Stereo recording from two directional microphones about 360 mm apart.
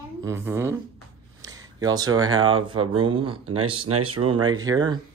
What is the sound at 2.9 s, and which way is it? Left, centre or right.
Speech, centre.